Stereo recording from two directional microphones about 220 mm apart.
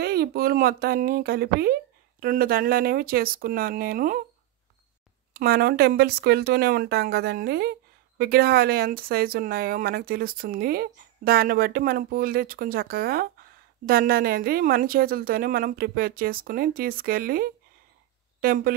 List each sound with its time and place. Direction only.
0.0 s speech: 45° right (ahead or behind)
5.3 s speech: 45° right (ahead or behind)